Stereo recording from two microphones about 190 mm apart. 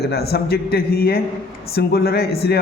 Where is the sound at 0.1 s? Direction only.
55° left (ahead or behind).